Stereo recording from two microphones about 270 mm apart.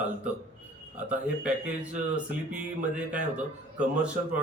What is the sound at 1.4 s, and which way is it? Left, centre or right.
Speech, centre.